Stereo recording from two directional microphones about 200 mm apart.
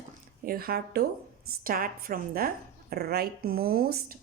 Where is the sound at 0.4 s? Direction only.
45° right (ahead or behind).